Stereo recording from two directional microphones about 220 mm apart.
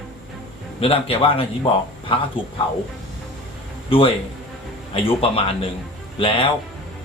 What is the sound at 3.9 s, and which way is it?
Speech, 25° left (ahead or behind).